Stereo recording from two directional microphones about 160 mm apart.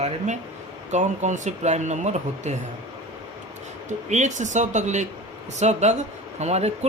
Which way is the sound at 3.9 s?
45° right (ahead or behind).